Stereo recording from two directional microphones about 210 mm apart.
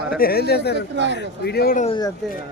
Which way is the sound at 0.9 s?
55° right (ahead or behind).